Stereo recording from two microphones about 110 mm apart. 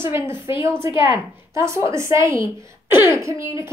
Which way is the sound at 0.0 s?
20° right (ahead or behind).